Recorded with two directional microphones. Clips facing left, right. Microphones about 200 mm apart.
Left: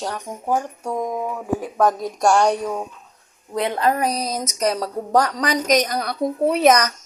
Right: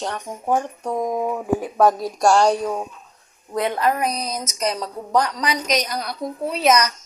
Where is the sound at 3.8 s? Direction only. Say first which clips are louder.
Left 1 dB; 35° left (ahead or behind); by 6.1 s 50° left (ahead or behind).